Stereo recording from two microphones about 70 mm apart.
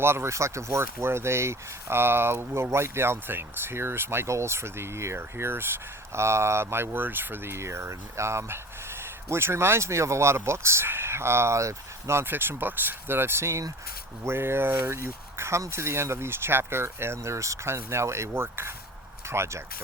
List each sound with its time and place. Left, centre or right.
0.0 s speech: right
12.2 s speech: right